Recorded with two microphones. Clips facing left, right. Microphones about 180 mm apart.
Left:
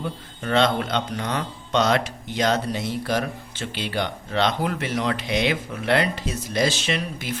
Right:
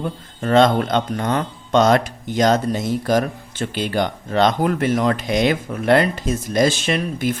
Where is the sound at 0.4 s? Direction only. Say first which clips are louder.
Right 6 dB; 45° right (ahead or behind).